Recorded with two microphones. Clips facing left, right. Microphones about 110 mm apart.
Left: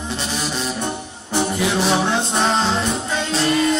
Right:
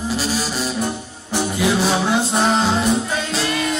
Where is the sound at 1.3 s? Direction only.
Centre (ahead or behind).